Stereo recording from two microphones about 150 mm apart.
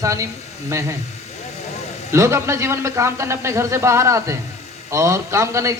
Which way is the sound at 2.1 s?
20° right (ahead or behind).